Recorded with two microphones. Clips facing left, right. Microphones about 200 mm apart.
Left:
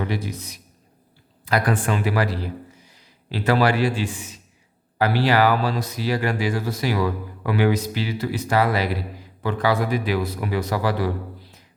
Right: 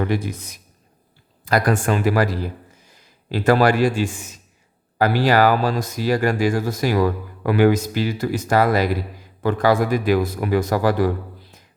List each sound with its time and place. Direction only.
0.0 s a man's voice: 50° right (ahead or behind)